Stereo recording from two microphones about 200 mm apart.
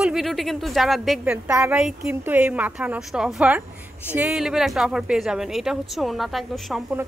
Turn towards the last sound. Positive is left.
turn(degrees=0)  # may be behind; listen again after turning